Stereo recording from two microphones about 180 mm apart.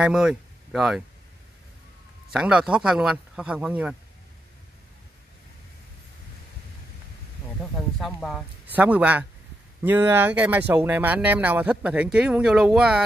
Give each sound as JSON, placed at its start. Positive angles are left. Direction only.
{"t": 0.0, "sound": "speech", "side_deg": -5}
{"t": 2.3, "sound": "speech", "side_deg": -5}
{"t": 8.0, "sound": "speech", "side_deg": 0}
{"t": 8.6, "sound": "speech", "side_deg": -10}